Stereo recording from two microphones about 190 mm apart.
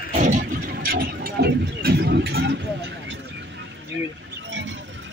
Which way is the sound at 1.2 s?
55° right (ahead or behind).